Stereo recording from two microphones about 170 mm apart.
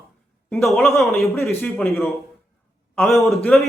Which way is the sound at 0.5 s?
Centre (ahead or behind).